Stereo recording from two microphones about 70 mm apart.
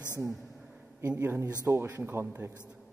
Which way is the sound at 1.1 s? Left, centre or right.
Right.